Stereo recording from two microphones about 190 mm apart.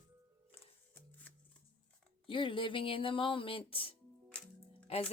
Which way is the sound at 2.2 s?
25° left (ahead or behind).